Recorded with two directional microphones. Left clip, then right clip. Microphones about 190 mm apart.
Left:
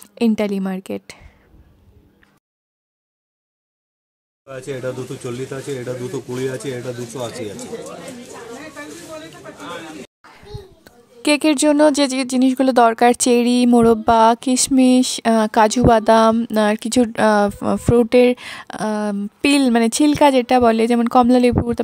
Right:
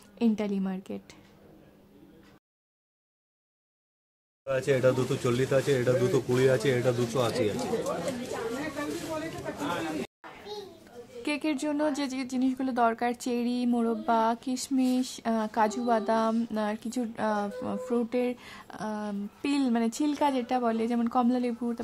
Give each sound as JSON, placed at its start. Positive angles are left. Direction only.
{"t": 0.1, "sound": "speech", "side_deg": 45}
{"t": 4.5, "sound": "speech", "side_deg": 50}
{"t": 11.2, "sound": "speech", "side_deg": 55}